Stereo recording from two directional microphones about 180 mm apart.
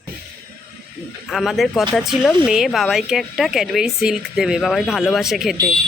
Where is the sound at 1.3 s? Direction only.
Centre (ahead or behind).